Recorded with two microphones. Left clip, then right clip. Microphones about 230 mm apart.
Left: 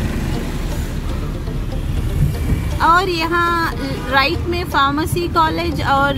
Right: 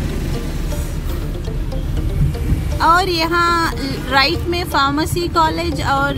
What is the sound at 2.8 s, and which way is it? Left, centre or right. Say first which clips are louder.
Speech: even; centre.